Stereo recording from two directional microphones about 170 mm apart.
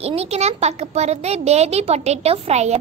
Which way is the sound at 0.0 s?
35° right (ahead or behind).